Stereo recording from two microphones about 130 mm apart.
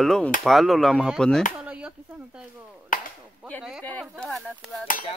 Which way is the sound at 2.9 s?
90° left.